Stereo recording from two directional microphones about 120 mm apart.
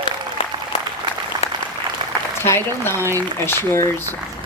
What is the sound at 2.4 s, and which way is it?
A woman's voice, 20° left (ahead or behind).